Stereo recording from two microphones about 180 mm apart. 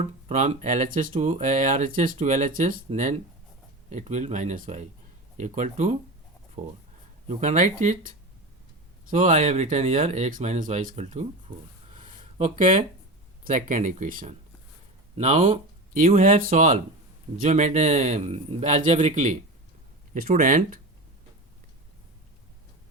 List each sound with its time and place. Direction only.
0.0 s speech: 40° right (ahead or behind)
11.9 s a sound: 45° right (ahead or behind)
13.5 s speech: 45° right (ahead or behind)
16.1 s speech: 50° right (ahead or behind)